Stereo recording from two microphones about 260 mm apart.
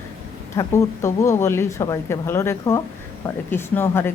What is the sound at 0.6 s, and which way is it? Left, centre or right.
Speech, centre.